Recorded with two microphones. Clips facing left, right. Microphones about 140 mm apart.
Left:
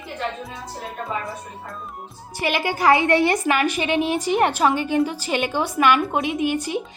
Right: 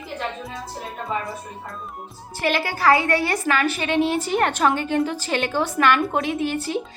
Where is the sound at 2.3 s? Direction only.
15° left (ahead or behind).